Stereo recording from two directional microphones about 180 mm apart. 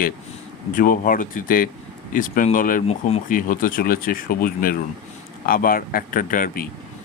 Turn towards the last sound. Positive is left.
turn(degrees=50)  # may be behind; listen again after turning